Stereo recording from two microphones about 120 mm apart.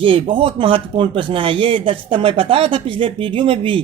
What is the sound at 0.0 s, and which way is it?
Speech, 45° right (ahead or behind).